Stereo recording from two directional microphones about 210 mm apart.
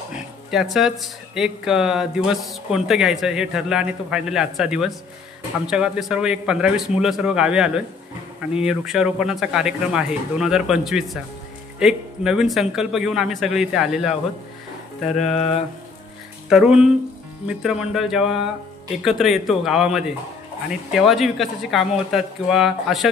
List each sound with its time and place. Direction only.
0.1 s speech: centre (ahead or behind)
15.1 s speech: 30° left (ahead or behind)
16.4 s speech: 5° right (ahead or behind)